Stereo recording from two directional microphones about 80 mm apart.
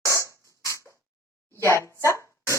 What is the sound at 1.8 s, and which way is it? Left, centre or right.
Speech, right.